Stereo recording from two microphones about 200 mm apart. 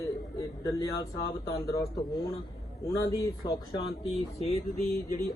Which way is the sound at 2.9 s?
15° left (ahead or behind).